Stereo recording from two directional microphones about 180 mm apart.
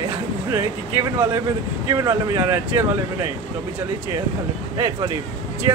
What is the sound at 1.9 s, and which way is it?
Speech, 20° right (ahead or behind).